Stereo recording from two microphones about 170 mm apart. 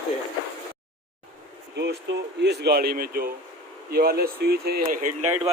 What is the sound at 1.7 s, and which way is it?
Speech, 75° right (ahead or behind).